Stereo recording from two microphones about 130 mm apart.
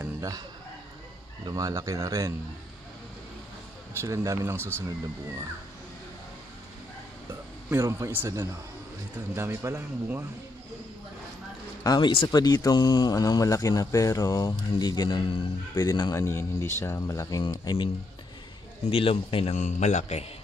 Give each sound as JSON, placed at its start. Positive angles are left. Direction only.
{"t": 0.0, "sound": "a sound", "side_deg": -25}
{"t": 1.4, "sound": "speech", "side_deg": -25}
{"t": 4.0, "sound": "speech", "side_deg": -25}
{"t": 7.7, "sound": "speech", "side_deg": -25}
{"t": 11.8, "sound": "speech", "side_deg": 30}
{"t": 18.9, "sound": "speech", "side_deg": 45}
{"t": 19.5, "sound": "a man's voice", "side_deg": 65}